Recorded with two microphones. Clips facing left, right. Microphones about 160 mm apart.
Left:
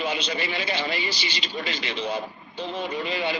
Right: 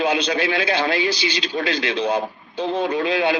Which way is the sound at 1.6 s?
65° right (ahead or behind).